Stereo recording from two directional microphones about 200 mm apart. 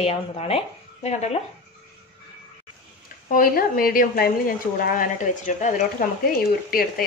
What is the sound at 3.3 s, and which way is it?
Speech, 45° left (ahead or behind).